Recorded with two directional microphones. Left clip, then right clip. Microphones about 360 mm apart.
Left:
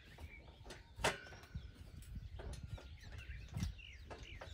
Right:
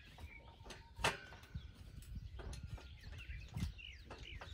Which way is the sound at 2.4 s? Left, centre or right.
Centre.